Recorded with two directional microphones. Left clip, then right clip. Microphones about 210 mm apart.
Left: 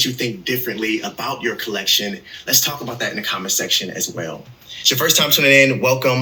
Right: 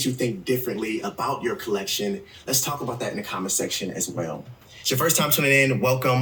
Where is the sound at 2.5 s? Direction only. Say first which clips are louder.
Left 7 dB; 20° right (ahead or behind).